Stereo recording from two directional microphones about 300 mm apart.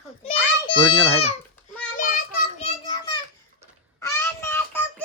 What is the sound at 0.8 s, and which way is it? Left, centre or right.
Speech, centre.